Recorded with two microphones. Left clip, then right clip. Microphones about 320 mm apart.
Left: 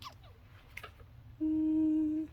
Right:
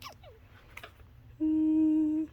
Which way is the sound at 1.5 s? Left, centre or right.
Centre.